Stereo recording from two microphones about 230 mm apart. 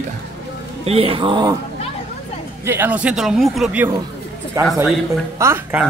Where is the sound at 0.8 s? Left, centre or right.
Right.